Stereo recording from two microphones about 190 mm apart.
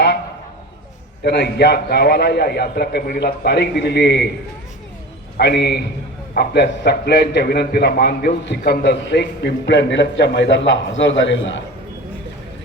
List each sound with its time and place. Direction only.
1.2 s a man's voice: 60° left (ahead or behind)
5.4 s a man's voice: 60° left (ahead or behind)